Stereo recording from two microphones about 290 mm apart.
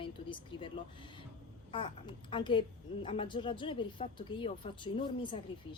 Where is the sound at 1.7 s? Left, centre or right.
Centre.